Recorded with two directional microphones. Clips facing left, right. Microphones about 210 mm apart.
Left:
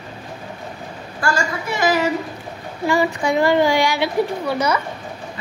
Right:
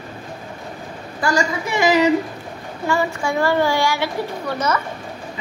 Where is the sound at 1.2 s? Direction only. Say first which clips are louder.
Right 2 dB; 15° right (ahead or behind).